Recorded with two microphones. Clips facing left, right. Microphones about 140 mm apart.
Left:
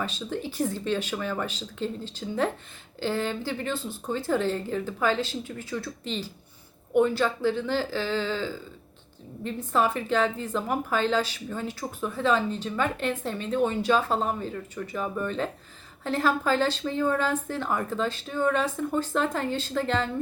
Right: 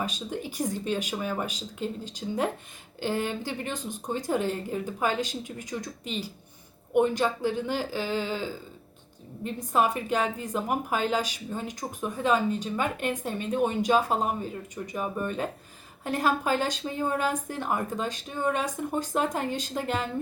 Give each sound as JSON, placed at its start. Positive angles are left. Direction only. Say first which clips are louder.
{"t": 0.0, "sound": "a woman's voice", "louder": "left 1 dB", "side_deg": -15}